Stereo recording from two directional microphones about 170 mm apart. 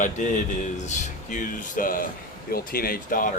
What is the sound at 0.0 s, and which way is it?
Speech, 45° left (ahead or behind).